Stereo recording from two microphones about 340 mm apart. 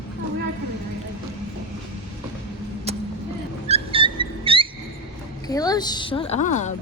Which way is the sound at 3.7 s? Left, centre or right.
Centre.